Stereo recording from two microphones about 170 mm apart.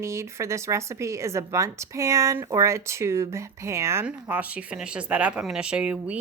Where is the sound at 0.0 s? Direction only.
15° right (ahead or behind).